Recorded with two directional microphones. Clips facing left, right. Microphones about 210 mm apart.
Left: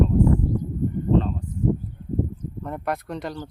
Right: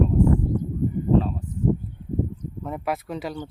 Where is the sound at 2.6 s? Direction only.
5° right (ahead or behind).